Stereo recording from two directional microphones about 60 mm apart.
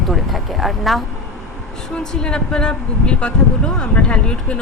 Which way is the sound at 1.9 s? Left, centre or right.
Centre.